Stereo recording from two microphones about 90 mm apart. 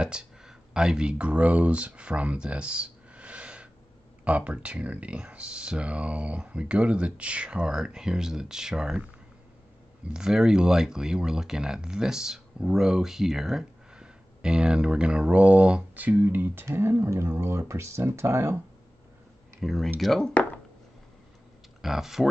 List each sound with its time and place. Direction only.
0.0 s speech: 10° right (ahead or behind)
10.1 s speech: 5° right (ahead or behind); by 18.6 s 30° right (ahead or behind)
19.6 s speech: centre (ahead or behind)
21.8 s speech: 5° right (ahead or behind)